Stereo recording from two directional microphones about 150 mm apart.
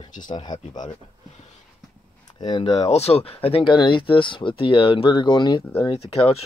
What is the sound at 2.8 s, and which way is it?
Speech, 45° left (ahead or behind).